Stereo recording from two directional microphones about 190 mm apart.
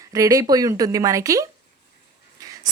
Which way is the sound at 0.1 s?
15° right (ahead or behind).